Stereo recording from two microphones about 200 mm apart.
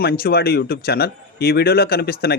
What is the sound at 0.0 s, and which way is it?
Speech, 50° left (ahead or behind).